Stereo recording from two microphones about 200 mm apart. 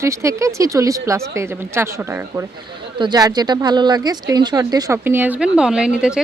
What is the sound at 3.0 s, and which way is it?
A woman's voice, 20° right (ahead or behind).